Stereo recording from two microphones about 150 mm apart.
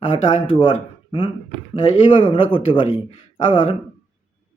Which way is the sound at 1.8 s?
35° left (ahead or behind).